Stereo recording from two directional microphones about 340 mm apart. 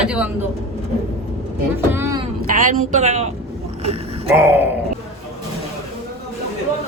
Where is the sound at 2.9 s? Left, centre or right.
Centre.